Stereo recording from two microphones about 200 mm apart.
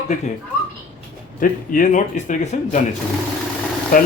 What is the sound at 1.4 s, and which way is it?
A man's voice, 40° left (ahead or behind).